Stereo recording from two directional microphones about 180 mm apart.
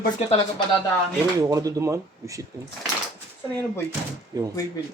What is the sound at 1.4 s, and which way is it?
Speech, 20° right (ahead or behind).